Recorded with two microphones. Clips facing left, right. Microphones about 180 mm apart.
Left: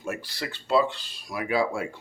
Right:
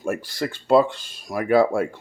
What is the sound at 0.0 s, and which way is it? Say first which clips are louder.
Speech: right 7 dB; 50° right (ahead or behind).